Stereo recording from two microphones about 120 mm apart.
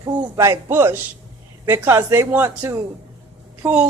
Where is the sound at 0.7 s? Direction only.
20° right (ahead or behind).